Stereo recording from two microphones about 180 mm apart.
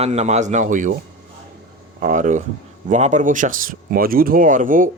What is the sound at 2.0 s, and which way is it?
Speech, 45° right (ahead or behind).